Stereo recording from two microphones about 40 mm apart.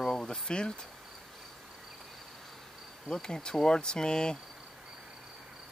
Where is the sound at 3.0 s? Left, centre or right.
Centre.